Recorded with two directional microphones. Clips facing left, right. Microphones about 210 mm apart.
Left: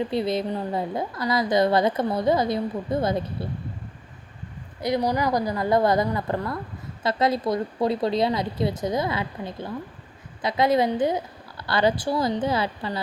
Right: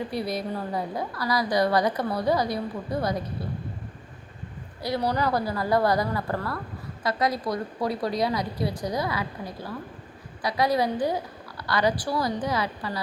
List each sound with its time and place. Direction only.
0.1 s a woman's voice: 25° left (ahead or behind)
4.8 s a woman's voice: 15° left (ahead or behind)